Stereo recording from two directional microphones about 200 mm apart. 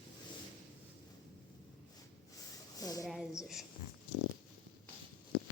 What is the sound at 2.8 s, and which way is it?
Speech, 20° left (ahead or behind).